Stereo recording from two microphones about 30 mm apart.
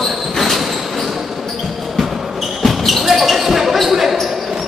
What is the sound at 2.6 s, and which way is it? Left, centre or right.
Basketball bounce, centre.